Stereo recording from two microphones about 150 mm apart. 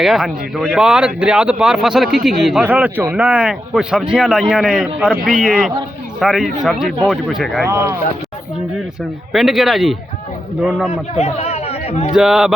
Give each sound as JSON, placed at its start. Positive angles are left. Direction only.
{"t": 0.0, "sound": "speech", "side_deg": 0}
{"t": 7.7, "sound": "speech", "side_deg": -20}
{"t": 9.3, "sound": "speech", "side_deg": 0}
{"t": 11.1, "sound": "speech", "side_deg": 45}
{"t": 12.1, "sound": "speech", "side_deg": -5}